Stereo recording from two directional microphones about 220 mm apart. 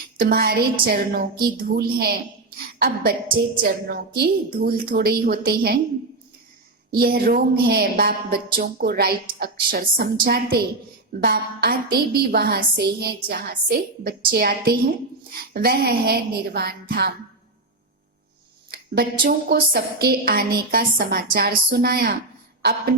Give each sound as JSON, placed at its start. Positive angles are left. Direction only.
{"t": 0.2, "sound": "a woman's voice", "side_deg": -45}
{"t": 6.9, "sound": "a woman's voice", "side_deg": -45}
{"t": 18.7, "sound": "a woman's voice", "side_deg": -45}